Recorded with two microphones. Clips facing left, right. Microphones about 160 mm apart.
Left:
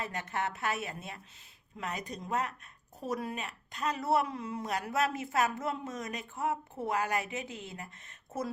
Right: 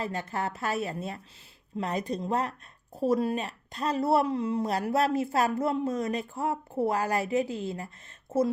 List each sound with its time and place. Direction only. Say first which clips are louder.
0.0 s speech: right 4 dB; 30° right (ahead or behind)